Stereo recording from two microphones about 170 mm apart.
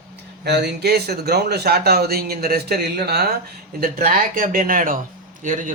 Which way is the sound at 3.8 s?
55° right (ahead or behind).